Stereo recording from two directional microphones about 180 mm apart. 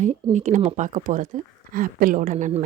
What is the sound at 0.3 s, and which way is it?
A woman's voice, 45° right (ahead or behind).